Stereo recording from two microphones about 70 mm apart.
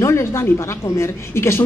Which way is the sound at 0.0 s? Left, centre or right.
Left.